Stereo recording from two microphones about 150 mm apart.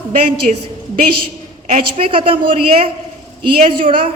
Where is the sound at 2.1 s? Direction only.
35° right (ahead or behind).